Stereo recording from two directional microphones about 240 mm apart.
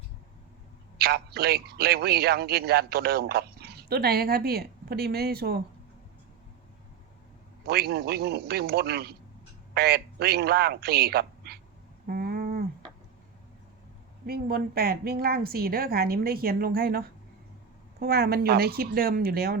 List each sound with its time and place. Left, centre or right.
0.9 s a man's voice: right
7.7 s a man's voice: right
12.0 s a sound: right
14.3 s a man's voice: right
18.0 s a man's voice: right